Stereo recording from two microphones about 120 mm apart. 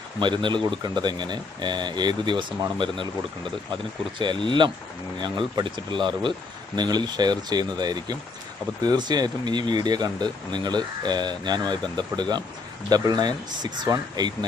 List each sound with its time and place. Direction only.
0.2 s speech: 40° right (ahead or behind)